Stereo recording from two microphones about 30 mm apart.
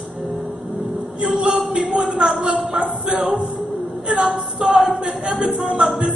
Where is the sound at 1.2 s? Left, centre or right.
Right.